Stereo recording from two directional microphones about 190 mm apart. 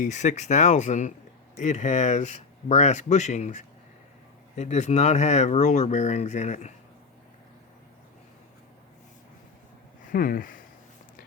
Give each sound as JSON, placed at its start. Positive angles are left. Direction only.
{"t": 0.0, "sound": "speech", "side_deg": 40}
{"t": 10.1, "sound": "speech", "side_deg": 50}